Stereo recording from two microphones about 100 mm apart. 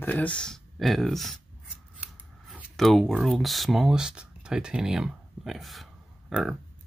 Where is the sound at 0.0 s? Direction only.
15° left (ahead or behind).